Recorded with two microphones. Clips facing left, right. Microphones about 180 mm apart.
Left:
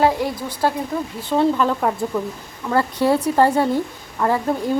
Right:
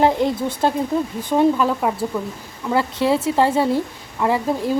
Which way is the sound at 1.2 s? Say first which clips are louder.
Even; 15° right (ahead or behind).